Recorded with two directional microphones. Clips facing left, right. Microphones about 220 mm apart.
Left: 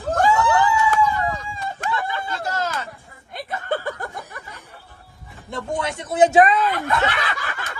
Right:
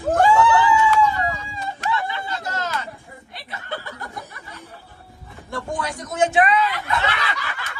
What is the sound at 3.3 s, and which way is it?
Chuckle, 50° left (ahead or behind).